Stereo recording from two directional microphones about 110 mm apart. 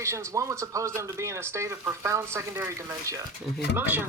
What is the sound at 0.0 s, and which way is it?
Speech, 25° right (ahead or behind).